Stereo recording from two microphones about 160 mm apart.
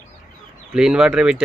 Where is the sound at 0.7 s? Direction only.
5° right (ahead or behind).